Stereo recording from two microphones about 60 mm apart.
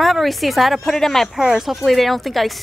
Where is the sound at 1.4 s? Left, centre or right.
Centre.